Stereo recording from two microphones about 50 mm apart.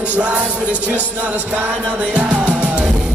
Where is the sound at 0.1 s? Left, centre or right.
Right.